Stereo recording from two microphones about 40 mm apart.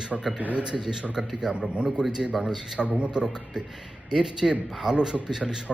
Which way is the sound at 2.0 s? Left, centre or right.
Centre.